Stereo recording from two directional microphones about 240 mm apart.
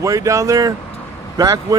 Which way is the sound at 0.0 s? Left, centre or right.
Centre.